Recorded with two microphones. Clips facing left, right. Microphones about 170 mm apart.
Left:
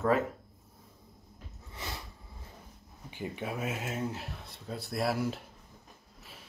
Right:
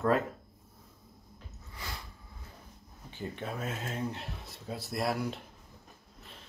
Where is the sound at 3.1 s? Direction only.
10° left (ahead or behind).